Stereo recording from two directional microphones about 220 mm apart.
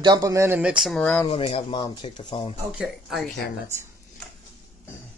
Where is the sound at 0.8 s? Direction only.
5° left (ahead or behind).